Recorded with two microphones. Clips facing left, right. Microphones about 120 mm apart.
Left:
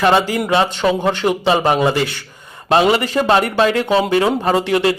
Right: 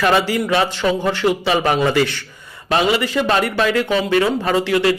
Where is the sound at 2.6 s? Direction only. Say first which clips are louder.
Left 3 dB; 35° left (ahead or behind).